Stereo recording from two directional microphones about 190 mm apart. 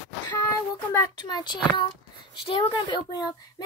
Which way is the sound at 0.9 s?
20° left (ahead or behind).